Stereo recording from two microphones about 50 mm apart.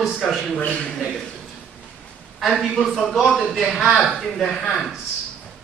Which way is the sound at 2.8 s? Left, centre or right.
Centre.